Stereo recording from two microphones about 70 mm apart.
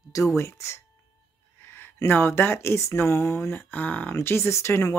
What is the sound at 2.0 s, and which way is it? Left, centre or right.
Speech, left.